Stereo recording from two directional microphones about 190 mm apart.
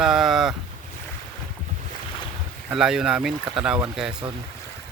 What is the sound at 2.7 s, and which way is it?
Speech, 5° right (ahead or behind).